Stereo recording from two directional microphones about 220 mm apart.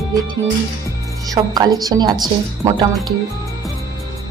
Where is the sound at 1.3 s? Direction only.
15° right (ahead or behind).